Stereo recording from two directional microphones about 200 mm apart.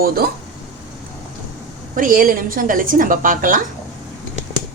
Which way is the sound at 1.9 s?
45° right (ahead or behind).